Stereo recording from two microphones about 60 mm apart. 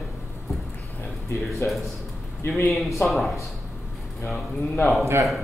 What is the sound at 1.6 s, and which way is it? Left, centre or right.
Speech, left.